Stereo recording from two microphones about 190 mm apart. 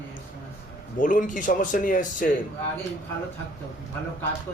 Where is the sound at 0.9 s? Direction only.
45° left (ahead or behind).